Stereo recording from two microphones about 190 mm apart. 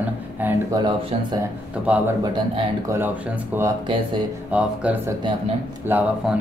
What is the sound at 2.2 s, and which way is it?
Speech, 20° right (ahead or behind).